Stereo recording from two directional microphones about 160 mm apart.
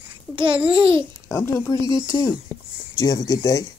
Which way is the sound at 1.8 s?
30° right (ahead or behind).